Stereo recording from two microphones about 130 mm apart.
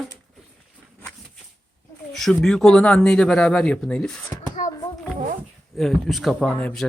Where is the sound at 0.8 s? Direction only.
5° right (ahead or behind).